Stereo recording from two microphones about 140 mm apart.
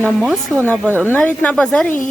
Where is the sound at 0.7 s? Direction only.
10° right (ahead or behind).